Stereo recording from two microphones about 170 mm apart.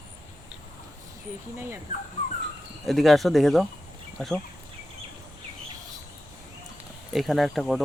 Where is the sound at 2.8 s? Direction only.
Centre (ahead or behind).